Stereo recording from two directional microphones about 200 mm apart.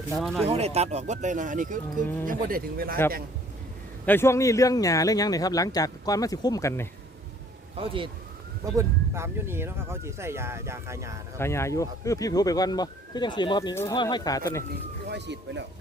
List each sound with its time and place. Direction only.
0.2 s speech: centre (ahead or behind)
0.4 s speech: 30° right (ahead or behind); by 3.0 s 45° right (ahead or behind)
4.0 s speech: 10° left (ahead or behind)
7.8 s speech: 25° right (ahead or behind)
11.3 s speech: 15° left (ahead or behind)
15.0 s speech: 60° right (ahead or behind)